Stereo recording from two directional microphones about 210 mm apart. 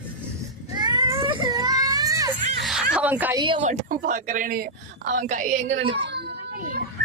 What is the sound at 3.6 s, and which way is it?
Speech, 35° right (ahead or behind).